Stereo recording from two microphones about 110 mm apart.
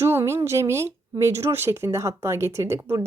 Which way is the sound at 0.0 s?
25° right (ahead or behind).